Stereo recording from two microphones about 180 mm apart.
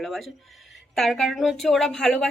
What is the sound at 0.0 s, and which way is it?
Speech, centre (ahead or behind).